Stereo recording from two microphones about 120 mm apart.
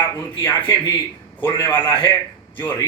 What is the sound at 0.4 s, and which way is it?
A man's voice, 25° left (ahead or behind).